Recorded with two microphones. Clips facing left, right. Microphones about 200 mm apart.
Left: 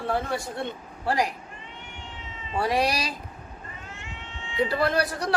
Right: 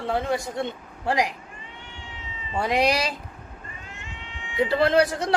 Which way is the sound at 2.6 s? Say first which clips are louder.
Right 3 dB; 20° right (ahead or behind).